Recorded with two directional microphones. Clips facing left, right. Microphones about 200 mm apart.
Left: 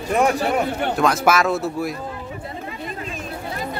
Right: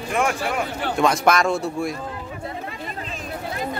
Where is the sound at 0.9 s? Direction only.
Centre (ahead or behind).